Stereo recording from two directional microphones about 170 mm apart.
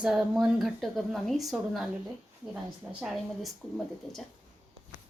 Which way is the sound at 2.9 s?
10° right (ahead or behind).